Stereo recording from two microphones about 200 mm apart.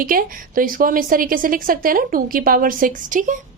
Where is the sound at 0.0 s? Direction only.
45° right (ahead or behind).